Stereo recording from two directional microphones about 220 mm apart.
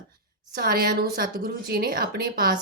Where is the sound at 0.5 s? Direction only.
45° right (ahead or behind).